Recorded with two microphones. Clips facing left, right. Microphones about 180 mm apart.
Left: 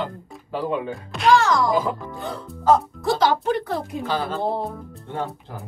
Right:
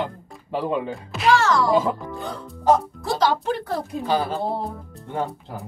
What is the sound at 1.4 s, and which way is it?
Speech, 15° left (ahead or behind).